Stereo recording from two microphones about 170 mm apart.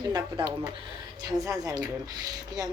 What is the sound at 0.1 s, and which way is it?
Speech, 25° right (ahead or behind).